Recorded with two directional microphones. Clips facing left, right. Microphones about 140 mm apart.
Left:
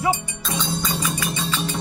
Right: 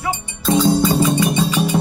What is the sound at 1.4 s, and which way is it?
Music, 10° right (ahead or behind).